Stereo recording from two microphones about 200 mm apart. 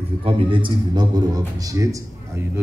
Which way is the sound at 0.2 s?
25° right (ahead or behind).